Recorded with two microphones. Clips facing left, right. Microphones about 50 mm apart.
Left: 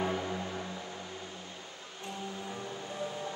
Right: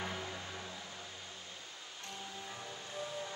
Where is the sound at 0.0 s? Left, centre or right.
Left.